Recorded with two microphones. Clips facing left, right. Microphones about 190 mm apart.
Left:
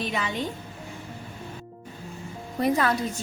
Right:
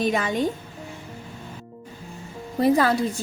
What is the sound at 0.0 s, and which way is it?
Speech, 45° right (ahead or behind).